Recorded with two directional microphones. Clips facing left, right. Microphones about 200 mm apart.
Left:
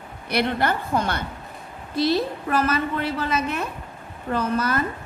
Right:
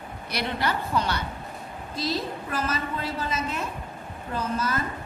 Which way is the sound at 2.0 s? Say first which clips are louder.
Left 8 dB; 65° left (ahead or behind).